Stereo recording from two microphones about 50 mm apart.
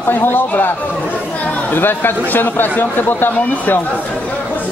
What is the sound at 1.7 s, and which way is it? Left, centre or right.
Speech, left.